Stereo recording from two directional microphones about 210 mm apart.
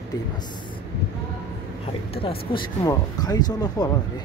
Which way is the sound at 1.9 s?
25° left (ahead or behind).